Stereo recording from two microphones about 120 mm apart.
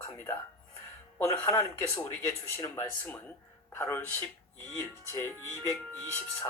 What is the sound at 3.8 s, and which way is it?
Speech, 20° left (ahead or behind).